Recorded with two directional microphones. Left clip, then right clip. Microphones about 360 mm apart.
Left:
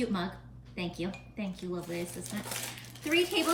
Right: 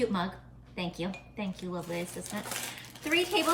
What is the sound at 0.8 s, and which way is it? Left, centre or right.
A woman's voice, centre.